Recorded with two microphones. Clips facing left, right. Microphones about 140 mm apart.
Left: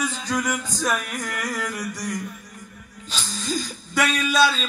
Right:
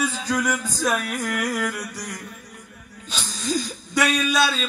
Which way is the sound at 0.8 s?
10° right (ahead or behind).